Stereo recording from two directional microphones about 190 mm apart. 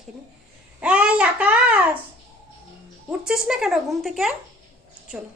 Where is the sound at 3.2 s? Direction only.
5° right (ahead or behind).